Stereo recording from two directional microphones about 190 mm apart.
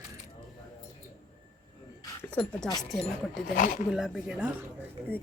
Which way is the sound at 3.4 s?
45° left (ahead or behind).